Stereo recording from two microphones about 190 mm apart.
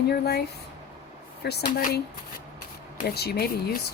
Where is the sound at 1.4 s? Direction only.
60° left (ahead or behind).